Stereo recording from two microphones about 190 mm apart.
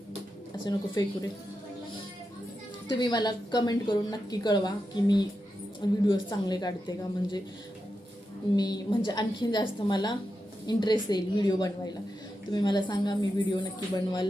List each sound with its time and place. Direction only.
0.6 s a woman's voice: 20° left (ahead or behind)
3.0 s a woman's voice: 20° left (ahead or behind)
8.5 s a woman's voice: 20° left (ahead or behind)